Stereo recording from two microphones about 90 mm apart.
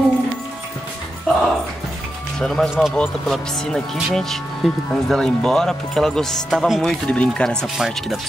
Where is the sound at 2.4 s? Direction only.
5° left (ahead or behind).